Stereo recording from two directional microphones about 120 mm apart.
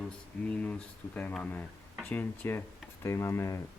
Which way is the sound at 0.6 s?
10° left (ahead or behind).